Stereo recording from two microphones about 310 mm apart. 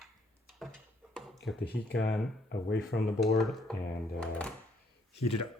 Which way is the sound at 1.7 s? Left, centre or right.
Left.